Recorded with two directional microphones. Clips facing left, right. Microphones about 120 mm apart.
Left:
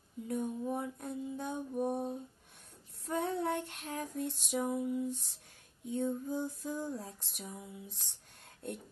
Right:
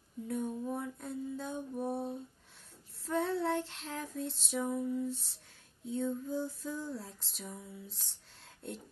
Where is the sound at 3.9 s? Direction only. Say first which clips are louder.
Left 1 dB; 15° left (ahead or behind).